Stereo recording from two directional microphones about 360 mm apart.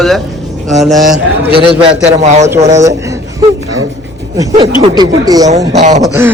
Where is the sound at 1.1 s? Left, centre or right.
Right; by 3.1 s centre.